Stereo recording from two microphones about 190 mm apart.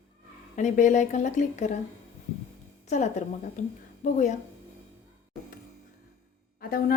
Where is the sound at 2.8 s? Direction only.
40° left (ahead or behind).